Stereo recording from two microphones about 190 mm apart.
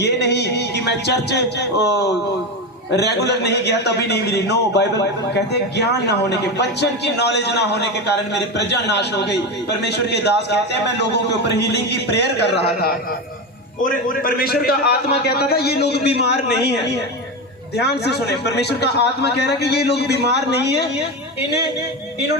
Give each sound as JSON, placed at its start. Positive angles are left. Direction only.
{"t": 0.0, "sound": "a man's voice", "side_deg": 60}
{"t": 17.7, "sound": "a man's voice", "side_deg": 60}